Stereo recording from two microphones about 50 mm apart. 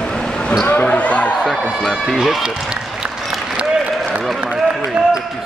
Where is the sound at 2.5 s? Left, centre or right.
Centre.